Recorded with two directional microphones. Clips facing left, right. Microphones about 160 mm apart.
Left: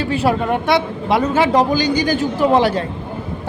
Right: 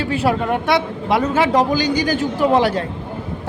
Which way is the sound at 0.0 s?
30° left (ahead or behind).